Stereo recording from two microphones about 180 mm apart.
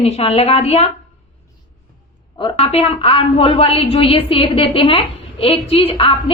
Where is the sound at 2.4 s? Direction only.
30° left (ahead or behind).